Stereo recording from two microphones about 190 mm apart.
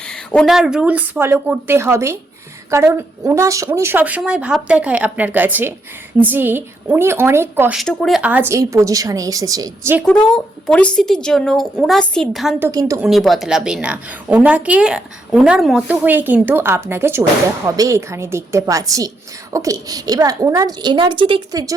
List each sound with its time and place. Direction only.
0.1 s a woman's voice: 5° left (ahead or behind); by 7.8 s 10° right (ahead or behind)
7.8 s a woman's voice: centre (ahead or behind); by 10.0 s 15° right (ahead or behind)
10.1 s a woman's voice: 5° left (ahead or behind); by 13.0 s 15° right (ahead or behind)
13.0 s a woman's voice: centre (ahead or behind); by 21.8 s 20° right (ahead or behind)